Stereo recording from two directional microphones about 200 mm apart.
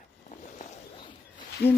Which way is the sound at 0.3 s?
35° left (ahead or behind).